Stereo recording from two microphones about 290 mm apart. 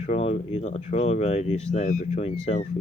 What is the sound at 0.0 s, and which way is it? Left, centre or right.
Speech, left.